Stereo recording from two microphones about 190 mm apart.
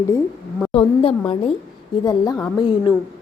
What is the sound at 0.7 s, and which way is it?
A woman's voice, 30° left (ahead or behind).